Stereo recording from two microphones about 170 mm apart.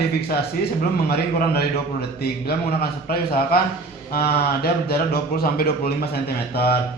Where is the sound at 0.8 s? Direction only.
70° left (ahead or behind).